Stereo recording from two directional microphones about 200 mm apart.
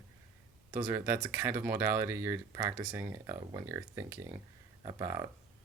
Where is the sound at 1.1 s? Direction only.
10° right (ahead or behind).